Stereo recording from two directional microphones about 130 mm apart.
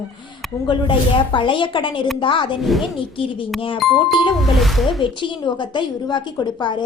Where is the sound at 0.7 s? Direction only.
40° left (ahead or behind).